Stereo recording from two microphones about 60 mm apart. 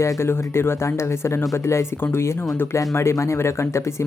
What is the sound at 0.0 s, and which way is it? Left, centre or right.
Speech, left.